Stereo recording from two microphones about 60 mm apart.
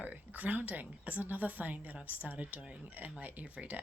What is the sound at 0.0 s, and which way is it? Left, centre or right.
A woman's voice, right.